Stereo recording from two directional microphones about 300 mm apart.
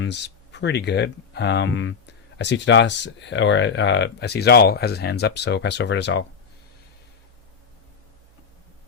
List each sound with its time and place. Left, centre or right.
0.0 s speech: left